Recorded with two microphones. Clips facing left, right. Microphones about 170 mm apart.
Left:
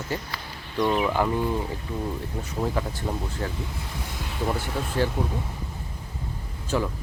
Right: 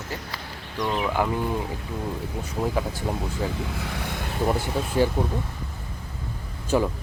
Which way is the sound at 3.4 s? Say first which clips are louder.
Right 4 dB; 10° right (ahead or behind).